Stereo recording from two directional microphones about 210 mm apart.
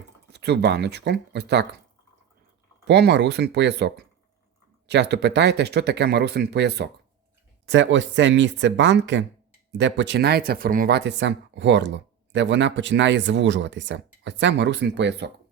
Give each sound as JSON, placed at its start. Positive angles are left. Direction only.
{"t": 0.3, "sound": "speech", "side_deg": -55}
{"t": 2.8, "sound": "speech", "side_deg": -50}